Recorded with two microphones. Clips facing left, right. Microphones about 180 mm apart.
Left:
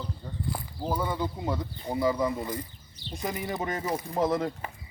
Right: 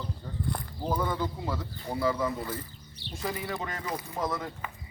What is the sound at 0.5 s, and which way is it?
Speech, 10° left (ahead or behind).